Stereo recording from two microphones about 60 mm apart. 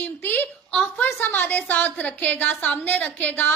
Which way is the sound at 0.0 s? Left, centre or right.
Left.